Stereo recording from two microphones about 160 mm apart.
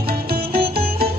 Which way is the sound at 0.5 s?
70° right (ahead or behind).